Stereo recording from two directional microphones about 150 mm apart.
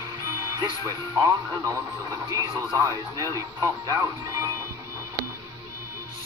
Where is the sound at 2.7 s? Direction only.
20° right (ahead or behind).